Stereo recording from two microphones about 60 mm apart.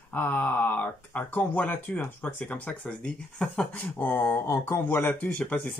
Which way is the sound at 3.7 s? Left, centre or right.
Left.